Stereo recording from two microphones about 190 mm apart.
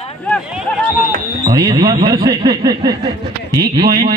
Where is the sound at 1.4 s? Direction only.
20° right (ahead or behind).